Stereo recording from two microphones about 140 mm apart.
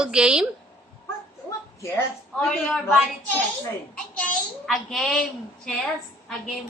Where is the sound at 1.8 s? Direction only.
15° left (ahead or behind).